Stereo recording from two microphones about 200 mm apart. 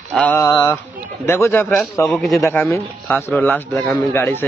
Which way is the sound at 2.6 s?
10° left (ahead or behind).